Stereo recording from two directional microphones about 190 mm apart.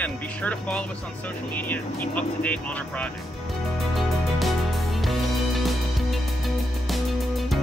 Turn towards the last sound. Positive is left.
turn(degrees=0)  # may be behind; listen again after turning